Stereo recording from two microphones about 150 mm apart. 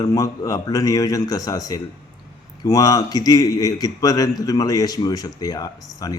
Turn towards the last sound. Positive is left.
turn(degrees=25)  # may be behind; listen again after turning